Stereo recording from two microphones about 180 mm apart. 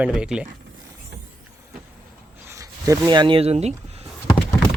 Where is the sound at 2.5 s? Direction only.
15° right (ahead or behind); by 4.1 s 35° right (ahead or behind).